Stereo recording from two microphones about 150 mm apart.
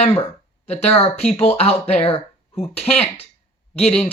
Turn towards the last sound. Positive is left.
turn(degrees=45)  # may be behind; listen again after turning